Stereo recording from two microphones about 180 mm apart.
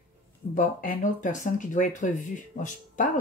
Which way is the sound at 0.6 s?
45° left (ahead or behind).